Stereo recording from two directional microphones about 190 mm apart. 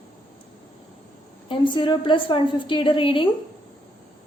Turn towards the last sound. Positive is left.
turn(degrees=25)  # may be behind; listen again after turning